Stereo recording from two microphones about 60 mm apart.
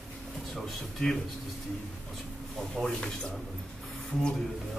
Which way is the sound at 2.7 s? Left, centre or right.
Centre.